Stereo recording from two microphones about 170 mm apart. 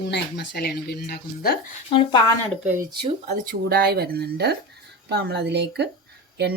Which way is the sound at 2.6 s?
15° right (ahead or behind).